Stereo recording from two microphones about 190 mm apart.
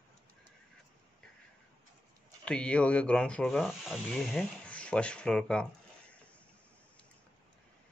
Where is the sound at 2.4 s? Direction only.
5° left (ahead or behind).